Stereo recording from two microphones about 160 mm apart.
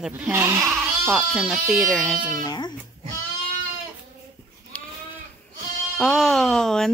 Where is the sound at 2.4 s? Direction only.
25° left (ahead or behind).